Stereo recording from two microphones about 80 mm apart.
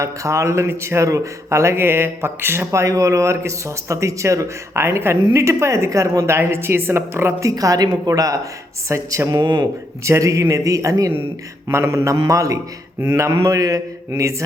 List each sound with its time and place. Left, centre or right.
0.0 s a man's voice: right
7.5 s a woman's voice: right
9.4 s speech: right
10.0 s a woman's voice: right